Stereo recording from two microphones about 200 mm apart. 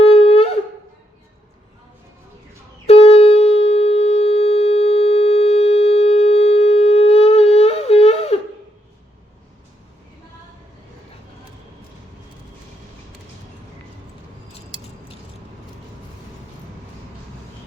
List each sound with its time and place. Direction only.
0.0 s wind instrument: 30° left (ahead or behind)
2.8 s wind instrument: 30° left (ahead or behind)